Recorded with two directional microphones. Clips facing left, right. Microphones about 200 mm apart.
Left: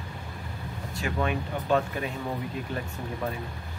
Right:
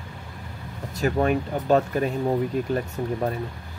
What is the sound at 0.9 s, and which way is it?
Speech, 40° right (ahead or behind).